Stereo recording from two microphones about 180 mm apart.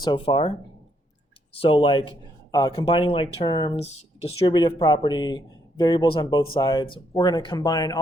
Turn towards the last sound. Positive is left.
turn(degrees=20)  # may be behind; listen again after turning